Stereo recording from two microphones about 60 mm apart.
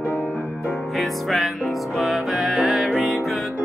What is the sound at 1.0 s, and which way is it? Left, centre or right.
Music, centre.